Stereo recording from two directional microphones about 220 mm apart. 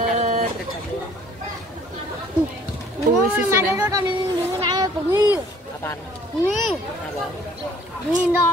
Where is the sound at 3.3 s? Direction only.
15° right (ahead or behind).